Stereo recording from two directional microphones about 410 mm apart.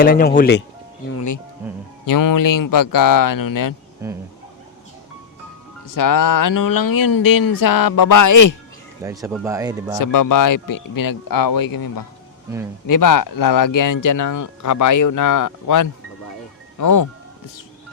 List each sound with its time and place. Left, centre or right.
0.0 s speech: left
1.1 s speech: left
4.0 s speech: centre
5.9 s speech: left
9.0 s speech: centre
10.0 s speech: left